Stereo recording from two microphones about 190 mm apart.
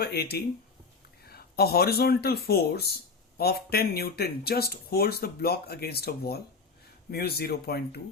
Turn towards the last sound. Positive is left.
turn(degrees=55)  # may be behind; listen again after turning